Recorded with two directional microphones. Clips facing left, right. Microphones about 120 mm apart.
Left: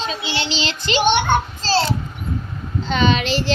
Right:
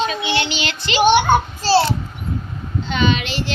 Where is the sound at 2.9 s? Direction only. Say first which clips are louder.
Left 2 dB; 35° left (ahead or behind).